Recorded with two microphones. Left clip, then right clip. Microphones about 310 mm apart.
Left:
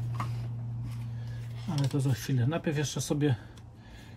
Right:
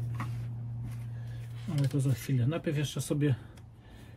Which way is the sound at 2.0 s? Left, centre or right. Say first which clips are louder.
Left 1 dB; centre.